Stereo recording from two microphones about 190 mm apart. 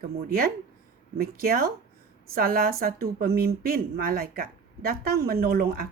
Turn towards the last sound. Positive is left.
turn(degrees=-50)  # may be behind; listen again after turning